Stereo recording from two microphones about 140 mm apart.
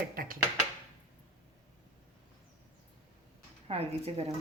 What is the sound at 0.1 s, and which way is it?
Speech, 90° right.